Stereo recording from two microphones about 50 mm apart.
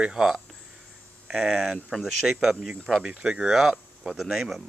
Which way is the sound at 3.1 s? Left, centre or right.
Centre.